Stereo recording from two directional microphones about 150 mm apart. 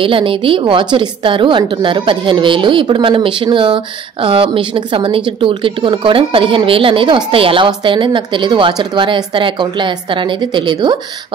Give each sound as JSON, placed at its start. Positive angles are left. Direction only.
{"t": 0.0, "sound": "a woman's voice", "side_deg": -35}